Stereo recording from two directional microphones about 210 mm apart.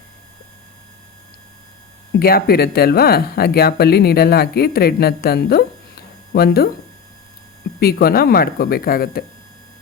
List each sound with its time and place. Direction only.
2.1 s speech: 45° left (ahead or behind)
7.8 s speech: 45° left (ahead or behind)